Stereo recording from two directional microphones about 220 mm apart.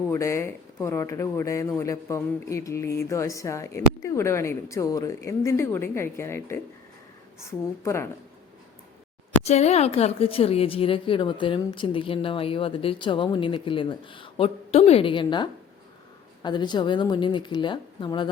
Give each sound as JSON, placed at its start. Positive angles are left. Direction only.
{"t": 0.1, "sound": "speech", "side_deg": 10}
{"t": 9.4, "sound": "speech", "side_deg": 30}